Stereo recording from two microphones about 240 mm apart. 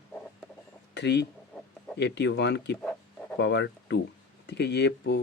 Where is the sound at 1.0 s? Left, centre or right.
Left.